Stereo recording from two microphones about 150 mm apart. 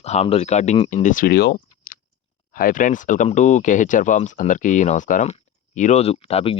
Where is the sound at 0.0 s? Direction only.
45° left (ahead or behind); by 1.5 s 90° left.